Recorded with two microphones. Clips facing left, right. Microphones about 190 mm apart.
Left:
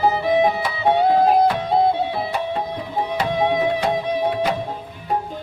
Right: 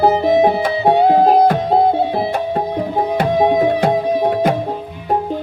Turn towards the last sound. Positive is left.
turn(degrees=-45)  # may be behind; listen again after turning